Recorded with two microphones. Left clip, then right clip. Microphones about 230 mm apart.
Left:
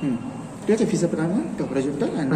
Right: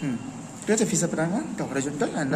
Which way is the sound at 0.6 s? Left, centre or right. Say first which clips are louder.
Left 3 dB; right.